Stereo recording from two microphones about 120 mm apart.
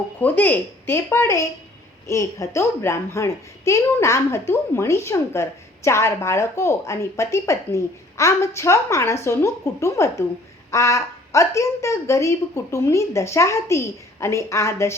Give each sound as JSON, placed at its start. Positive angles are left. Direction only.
{"t": 0.2, "sound": "a child's voice", "side_deg": 15}